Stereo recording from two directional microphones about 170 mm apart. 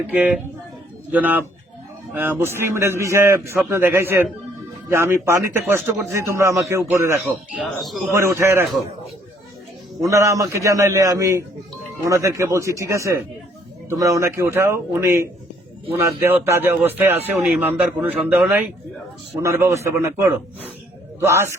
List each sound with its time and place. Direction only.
0.1 s speech: 10° right (ahead or behind)
7.6 s speech: centre (ahead or behind)
8.1 s speech: 15° right (ahead or behind)
10.0 s a man's voice: 20° right (ahead or behind)
19.4 s speech: 15° right (ahead or behind)